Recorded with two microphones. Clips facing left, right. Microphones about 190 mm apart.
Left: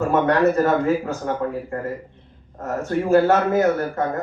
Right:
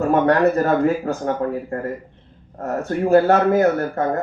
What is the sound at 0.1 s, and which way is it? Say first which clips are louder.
A man's voice: right 2 dB; 40° right (ahead or behind).